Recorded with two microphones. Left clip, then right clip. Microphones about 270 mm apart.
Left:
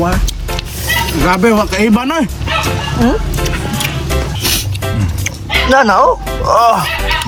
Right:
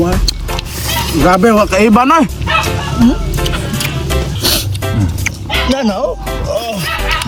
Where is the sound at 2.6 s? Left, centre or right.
Centre.